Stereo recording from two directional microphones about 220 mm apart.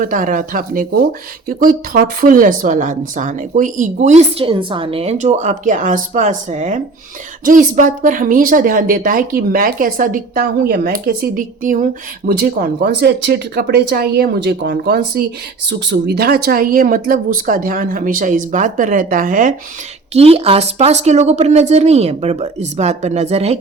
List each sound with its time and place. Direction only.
0.0 s a woman's voice: 40° right (ahead or behind)
20.1 s speech: 25° right (ahead or behind)